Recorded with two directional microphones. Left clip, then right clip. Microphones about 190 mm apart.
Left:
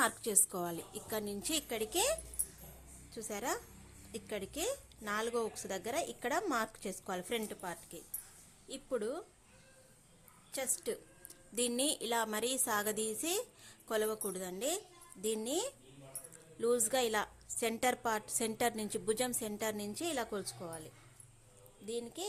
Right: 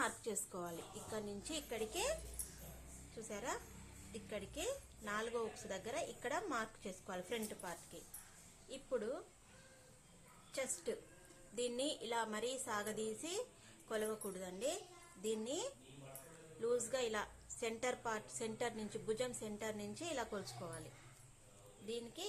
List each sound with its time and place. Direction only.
0.0 s a woman's voice: 50° left (ahead or behind)
3.2 s a woman's voice: 60° left (ahead or behind)
10.5 s a woman's voice: 60° left (ahead or behind)
21.8 s speech: 45° left (ahead or behind)